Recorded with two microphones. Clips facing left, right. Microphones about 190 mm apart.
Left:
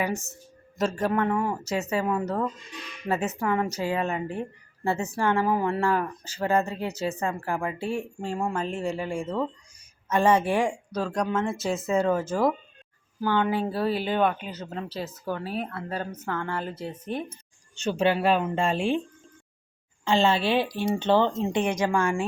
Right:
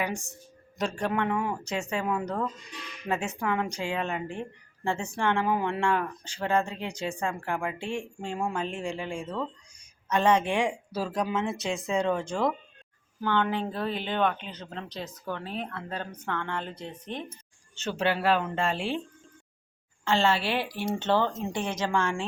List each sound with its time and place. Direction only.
0.0 s a woman's voice: 5° left (ahead or behind)
20.1 s speech: 15° left (ahead or behind)